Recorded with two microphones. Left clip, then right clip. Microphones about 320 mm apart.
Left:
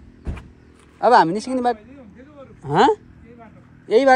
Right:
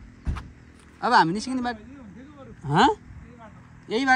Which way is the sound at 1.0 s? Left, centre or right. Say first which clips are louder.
Left 6 dB; centre.